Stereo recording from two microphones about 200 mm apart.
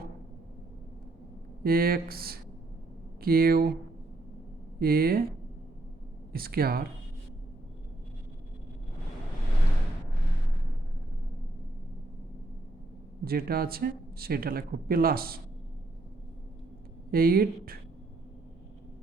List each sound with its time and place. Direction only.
1.6 s speech: 50° right (ahead or behind)
4.8 s speech: 50° right (ahead or behind)
6.3 s speech: 50° right (ahead or behind)
13.2 s speech: 50° right (ahead or behind)
17.1 s speech: 50° right (ahead or behind)